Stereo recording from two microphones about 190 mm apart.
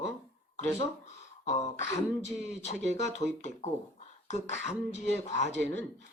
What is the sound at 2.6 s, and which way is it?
Speech, 35° left (ahead or behind).